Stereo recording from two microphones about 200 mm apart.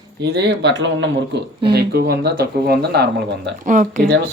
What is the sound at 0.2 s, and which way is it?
Speech, 60° right (ahead or behind).